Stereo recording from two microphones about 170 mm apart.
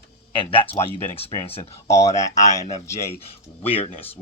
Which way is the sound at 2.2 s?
20° left (ahead or behind).